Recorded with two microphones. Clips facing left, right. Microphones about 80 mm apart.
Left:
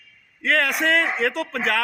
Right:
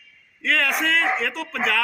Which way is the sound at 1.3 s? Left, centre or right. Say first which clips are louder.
Left 1 dB; left.